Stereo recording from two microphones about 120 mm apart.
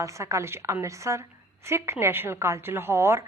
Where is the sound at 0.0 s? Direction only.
25° right (ahead or behind).